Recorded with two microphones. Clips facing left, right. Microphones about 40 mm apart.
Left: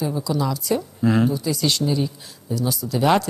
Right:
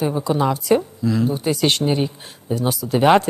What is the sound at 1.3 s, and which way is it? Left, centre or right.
Speech, right.